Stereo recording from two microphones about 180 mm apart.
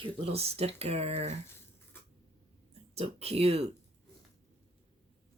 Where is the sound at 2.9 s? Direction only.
35° right (ahead or behind).